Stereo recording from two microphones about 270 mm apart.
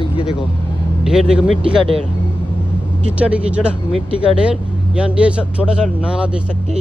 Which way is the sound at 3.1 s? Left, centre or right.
Centre.